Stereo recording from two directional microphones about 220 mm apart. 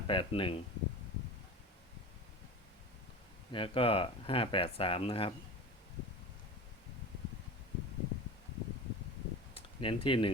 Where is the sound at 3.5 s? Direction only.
25° left (ahead or behind).